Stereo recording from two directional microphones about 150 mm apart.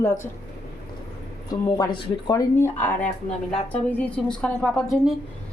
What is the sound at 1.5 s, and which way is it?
Speech, 25° left (ahead or behind).